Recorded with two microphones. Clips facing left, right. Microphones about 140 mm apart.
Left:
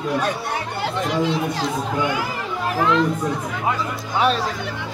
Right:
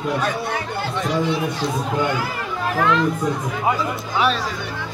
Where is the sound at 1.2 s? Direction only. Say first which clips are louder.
Left 2 dB; 90° left.